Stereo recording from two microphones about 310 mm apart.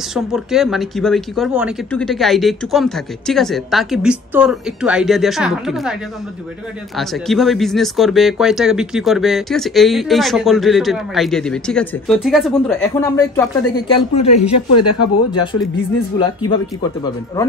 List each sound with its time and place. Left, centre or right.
0.1 s speech: centre
7.0 s speech: centre
14.5 s speech: left
16.2 s speech: centre